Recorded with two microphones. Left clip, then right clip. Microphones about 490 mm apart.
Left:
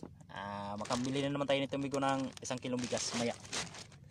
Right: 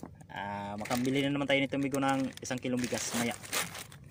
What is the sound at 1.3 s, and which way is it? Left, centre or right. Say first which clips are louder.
A man's voice: right 2 dB; left.